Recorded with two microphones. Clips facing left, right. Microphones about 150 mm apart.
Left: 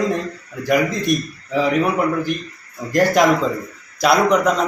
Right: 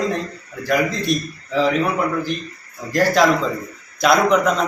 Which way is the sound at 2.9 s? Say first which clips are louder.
Left 1 dB; 20° left (ahead or behind).